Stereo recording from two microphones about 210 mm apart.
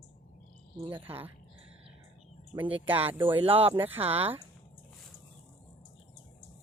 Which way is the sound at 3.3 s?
25° right (ahead or behind).